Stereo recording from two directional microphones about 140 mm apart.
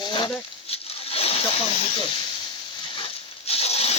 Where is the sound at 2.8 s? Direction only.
40° left (ahead or behind).